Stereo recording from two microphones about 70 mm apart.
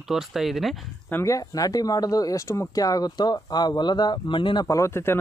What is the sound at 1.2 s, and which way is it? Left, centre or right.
Speech, left.